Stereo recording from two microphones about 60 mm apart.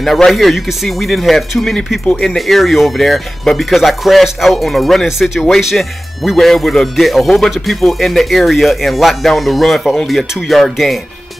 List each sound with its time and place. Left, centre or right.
0.0 s speech: centre
2.3 s speech: centre